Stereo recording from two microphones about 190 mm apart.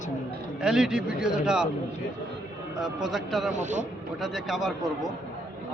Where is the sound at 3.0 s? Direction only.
Centre (ahead or behind).